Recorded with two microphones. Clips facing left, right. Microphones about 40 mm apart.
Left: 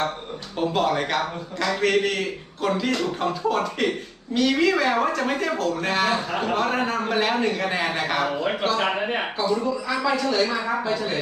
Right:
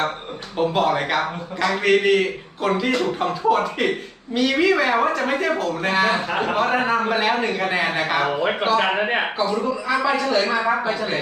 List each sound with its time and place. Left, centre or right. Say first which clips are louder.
0.6 s a man's voice: right 3 dB; centre
6.1 s a man's voice: right 3 dB; right
6.6 s a man's voice: right 7 dB; centre
9.0 s a man's voice: right 4 dB; right